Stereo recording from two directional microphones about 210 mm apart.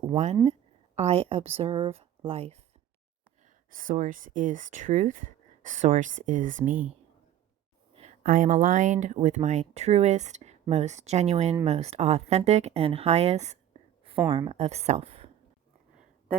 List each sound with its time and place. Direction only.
0.9 s speech: 30° right (ahead or behind)
3.4 s speech: 40° right (ahead or behind)
7.9 s speech: 35° right (ahead or behind)